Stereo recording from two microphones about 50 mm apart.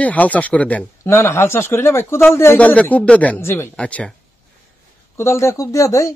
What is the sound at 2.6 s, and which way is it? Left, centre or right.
Speech, left.